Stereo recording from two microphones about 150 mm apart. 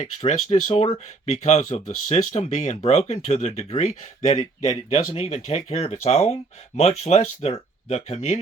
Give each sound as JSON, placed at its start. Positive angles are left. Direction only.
{"t": 0.0, "sound": "speech", "side_deg": 50}